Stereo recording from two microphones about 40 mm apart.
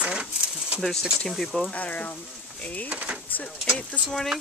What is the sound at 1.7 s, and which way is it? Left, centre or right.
Speech, left.